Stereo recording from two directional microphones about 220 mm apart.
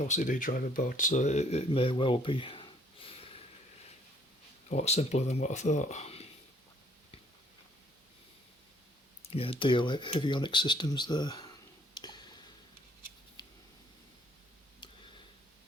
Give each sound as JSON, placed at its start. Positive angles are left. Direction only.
{"t": 0.0, "sound": "speech", "side_deg": 35}
{"t": 4.7, "sound": "speech", "side_deg": 30}
{"t": 9.2, "sound": "speech", "side_deg": 25}
{"t": 11.9, "sound": "a sound", "side_deg": 20}